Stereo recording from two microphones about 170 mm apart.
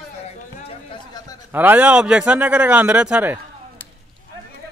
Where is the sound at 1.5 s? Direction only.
10° right (ahead or behind).